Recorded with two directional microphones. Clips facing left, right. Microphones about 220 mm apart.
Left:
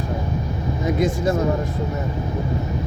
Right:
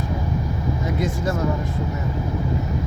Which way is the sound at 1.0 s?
15° left (ahead or behind).